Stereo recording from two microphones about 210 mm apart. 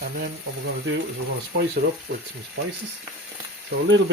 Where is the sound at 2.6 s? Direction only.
50° right (ahead or behind).